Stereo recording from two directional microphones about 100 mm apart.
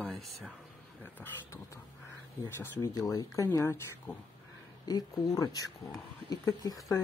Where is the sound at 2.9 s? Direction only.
35° left (ahead or behind).